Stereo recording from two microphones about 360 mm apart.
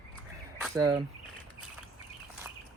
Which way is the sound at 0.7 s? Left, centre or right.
Centre.